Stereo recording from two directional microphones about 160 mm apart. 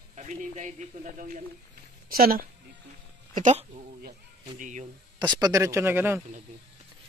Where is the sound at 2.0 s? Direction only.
65° right (ahead or behind).